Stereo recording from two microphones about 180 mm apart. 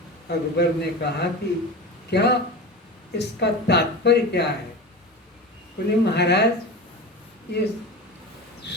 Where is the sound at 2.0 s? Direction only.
70° left (ahead or behind).